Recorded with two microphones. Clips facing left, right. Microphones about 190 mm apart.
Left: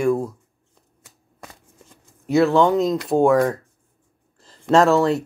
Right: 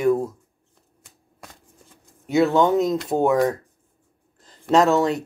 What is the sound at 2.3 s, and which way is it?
Speech, centre (ahead or behind).